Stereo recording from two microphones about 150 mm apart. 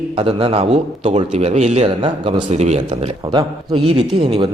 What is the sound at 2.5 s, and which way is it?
Speech, 45° right (ahead or behind).